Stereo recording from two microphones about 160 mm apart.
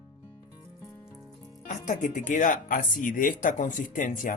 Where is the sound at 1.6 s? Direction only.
50° left (ahead or behind).